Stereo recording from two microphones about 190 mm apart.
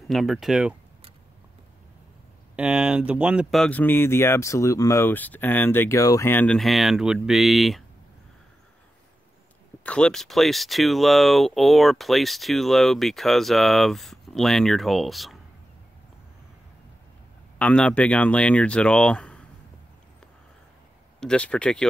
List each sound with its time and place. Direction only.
0.1 s speech: centre (ahead or behind)
2.5 s speech: 5° right (ahead or behind)
9.8 s speech: 5° left (ahead or behind)
17.6 s speech: 5° left (ahead or behind)
21.2 s speech: 5° left (ahead or behind)